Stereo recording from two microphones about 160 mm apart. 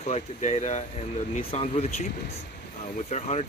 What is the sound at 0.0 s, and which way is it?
Speech, 45° left (ahead or behind).